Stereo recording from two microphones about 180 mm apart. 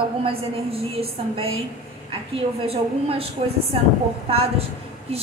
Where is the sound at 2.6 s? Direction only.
35° right (ahead or behind).